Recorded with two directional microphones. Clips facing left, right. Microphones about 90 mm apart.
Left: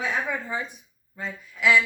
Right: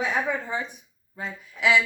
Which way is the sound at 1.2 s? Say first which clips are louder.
Even; 20° right (ahead or behind).